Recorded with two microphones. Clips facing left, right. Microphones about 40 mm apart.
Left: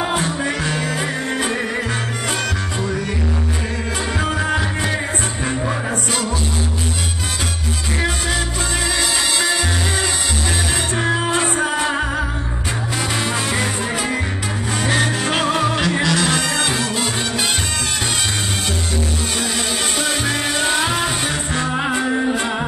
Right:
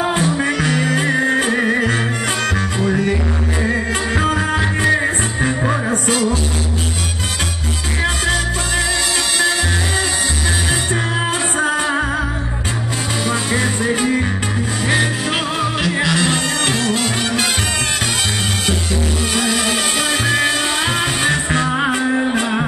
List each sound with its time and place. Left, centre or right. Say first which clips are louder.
0.4 s music: right 4 dB; right
15.4 s music: left 1 dB; centre
16.2 s music: right 1 dB; right